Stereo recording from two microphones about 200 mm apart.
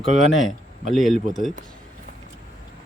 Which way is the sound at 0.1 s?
35° right (ahead or behind).